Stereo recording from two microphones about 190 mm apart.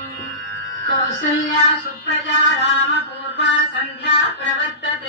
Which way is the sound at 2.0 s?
65° left (ahead or behind).